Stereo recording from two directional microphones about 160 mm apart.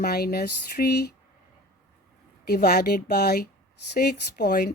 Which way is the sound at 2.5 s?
70° left (ahead or behind).